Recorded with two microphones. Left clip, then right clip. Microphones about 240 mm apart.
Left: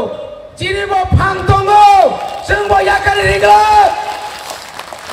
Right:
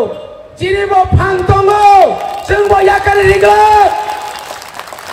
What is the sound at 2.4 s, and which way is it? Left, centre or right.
Speech, left.